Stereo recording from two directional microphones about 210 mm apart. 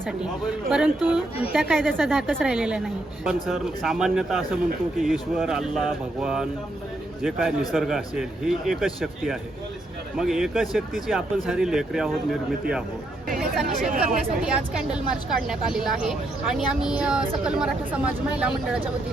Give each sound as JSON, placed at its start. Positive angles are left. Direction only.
{"t": 0.7, "sound": "speech", "side_deg": -5}
{"t": 13.7, "sound": "speech", "side_deg": -40}
{"t": 14.4, "sound": "speech", "side_deg": -5}